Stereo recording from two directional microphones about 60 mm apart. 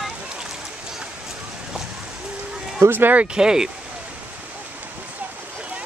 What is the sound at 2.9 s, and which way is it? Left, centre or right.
Speech, right.